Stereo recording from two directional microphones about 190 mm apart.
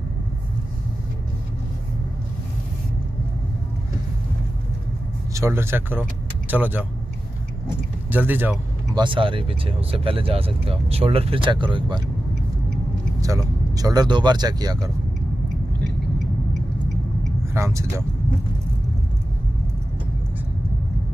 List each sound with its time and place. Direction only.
5.3 s speech: 15° right (ahead or behind)
8.1 s speech: 10° right (ahead or behind)
8.9 s speech: 25° right (ahead or behind)
13.2 s speech: 20° right (ahead or behind)
17.6 s speech: 15° right (ahead or behind)